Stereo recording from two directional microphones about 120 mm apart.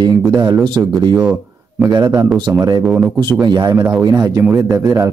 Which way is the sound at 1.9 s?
35° right (ahead or behind).